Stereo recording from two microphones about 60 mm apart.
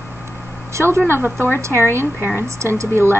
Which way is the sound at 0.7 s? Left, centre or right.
Right.